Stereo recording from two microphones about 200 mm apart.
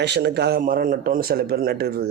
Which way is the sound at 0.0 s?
55° right (ahead or behind).